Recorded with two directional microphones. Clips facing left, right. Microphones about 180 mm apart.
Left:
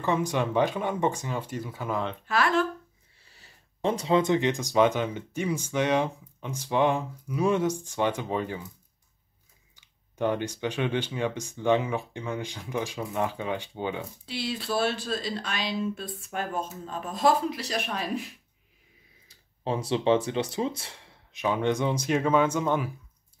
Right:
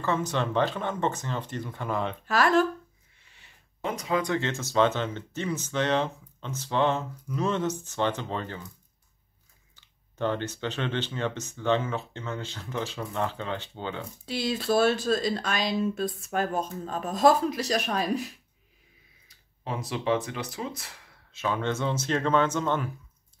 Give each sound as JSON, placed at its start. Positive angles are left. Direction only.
{"t": 0.0, "sound": "speech", "side_deg": 15}
{"t": 2.2, "sound": "speech", "side_deg": -40}
{"t": 3.2, "sound": "speech", "side_deg": 35}
{"t": 9.8, "sound": "speech", "side_deg": 15}
{"t": 14.2, "sound": "speech", "side_deg": -45}
{"t": 19.2, "sound": "speech", "side_deg": 30}
{"t": 21.3, "sound": "speech", "side_deg": 15}